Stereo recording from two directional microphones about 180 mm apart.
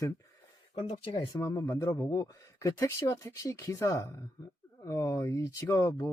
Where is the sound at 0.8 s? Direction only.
30° left (ahead or behind).